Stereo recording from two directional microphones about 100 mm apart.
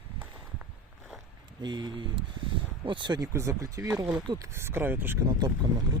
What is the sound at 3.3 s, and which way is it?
Speech, 30° right (ahead or behind).